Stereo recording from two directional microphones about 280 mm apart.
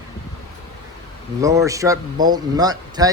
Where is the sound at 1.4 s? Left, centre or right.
Centre.